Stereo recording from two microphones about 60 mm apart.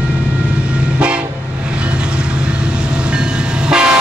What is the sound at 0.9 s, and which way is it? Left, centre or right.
Train, centre.